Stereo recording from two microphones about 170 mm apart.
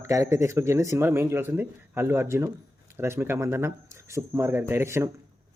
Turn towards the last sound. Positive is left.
turn(degrees=-15)  # may be behind; listen again after turning